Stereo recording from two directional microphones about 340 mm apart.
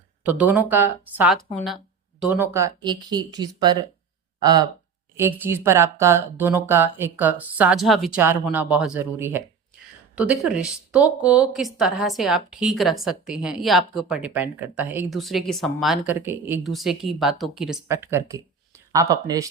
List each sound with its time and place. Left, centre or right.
0.2 s speech: centre